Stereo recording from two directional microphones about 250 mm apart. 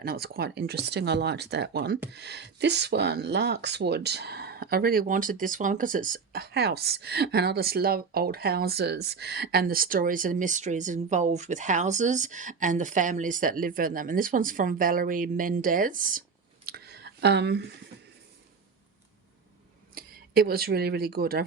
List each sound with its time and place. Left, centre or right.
0.0 s speech: right
16.6 s a sound: right
19.9 s speech: right